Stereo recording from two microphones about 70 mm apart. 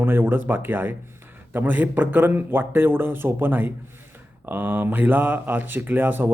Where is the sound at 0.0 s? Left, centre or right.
Right.